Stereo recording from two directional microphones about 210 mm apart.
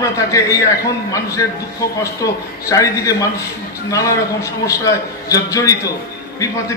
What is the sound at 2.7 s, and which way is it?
A man's voice, 15° left (ahead or behind).